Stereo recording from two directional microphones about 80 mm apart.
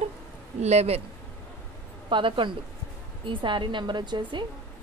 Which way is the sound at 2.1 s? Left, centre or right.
Right.